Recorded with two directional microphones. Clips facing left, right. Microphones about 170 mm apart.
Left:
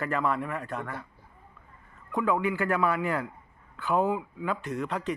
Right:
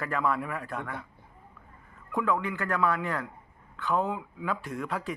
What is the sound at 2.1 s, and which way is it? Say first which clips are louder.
Speech: left 2 dB; centre (ahead or behind).